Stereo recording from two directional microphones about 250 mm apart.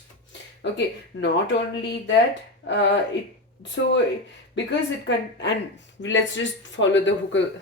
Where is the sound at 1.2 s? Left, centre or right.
Left.